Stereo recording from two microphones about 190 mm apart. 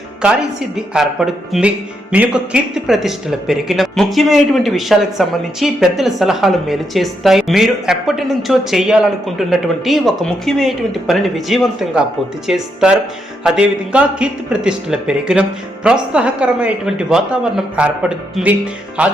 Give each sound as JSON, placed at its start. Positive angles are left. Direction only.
{"t": 0.9, "sound": "speech", "side_deg": 0}